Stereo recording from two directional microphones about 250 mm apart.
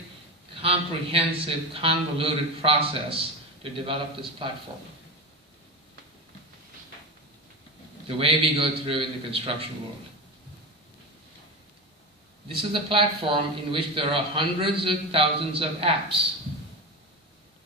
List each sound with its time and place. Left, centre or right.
0.6 s speech: right
8.0 s speech: right
12.7 s speech: right